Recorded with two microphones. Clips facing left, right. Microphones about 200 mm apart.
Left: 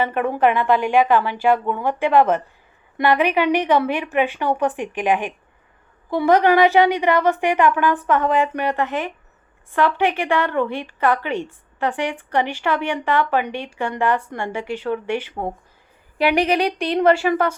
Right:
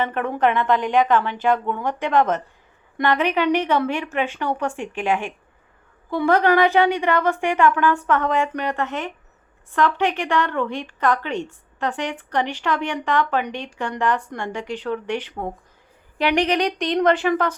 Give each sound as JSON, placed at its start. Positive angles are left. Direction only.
{"t": 0.0, "sound": "speech", "side_deg": 10}